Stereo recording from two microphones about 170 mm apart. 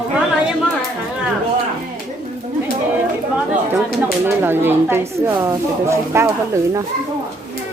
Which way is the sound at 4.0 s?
10° right (ahead or behind).